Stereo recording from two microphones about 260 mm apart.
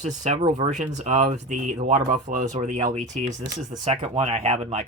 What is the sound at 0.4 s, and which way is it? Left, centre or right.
Speech, right.